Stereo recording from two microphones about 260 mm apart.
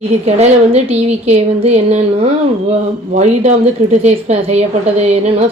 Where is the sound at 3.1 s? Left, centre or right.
Right.